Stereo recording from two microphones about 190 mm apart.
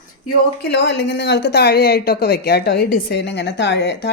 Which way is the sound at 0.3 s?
55° left (ahead or behind).